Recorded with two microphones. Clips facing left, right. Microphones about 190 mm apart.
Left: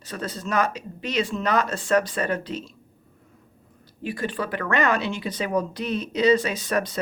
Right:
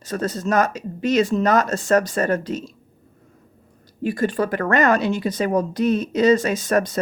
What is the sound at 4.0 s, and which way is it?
Speech, 45° right (ahead or behind).